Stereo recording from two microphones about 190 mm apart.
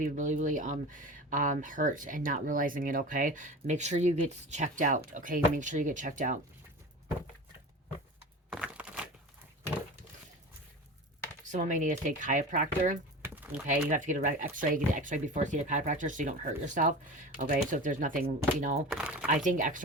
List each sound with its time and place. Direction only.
0.0 s speech: 40° right (ahead or behind)
8.4 s a sound: 5° right (ahead or behind)
11.4 s speech: 40° right (ahead or behind)
13.2 s a sound: 10° right (ahead or behind)
13.9 s speech: 40° right (ahead or behind)
18.9 s speech: 5° right (ahead or behind)
19.5 s speech: 40° right (ahead or behind)